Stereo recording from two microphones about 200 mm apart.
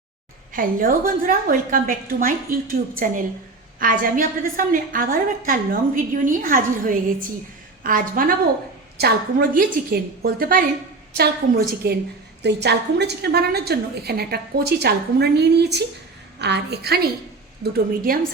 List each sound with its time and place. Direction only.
0.5 s a woman's voice: 45° right (ahead or behind)